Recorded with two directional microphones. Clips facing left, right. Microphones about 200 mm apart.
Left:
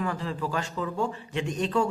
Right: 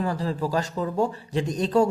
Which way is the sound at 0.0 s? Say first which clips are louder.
Right 4 dB; 35° right (ahead or behind).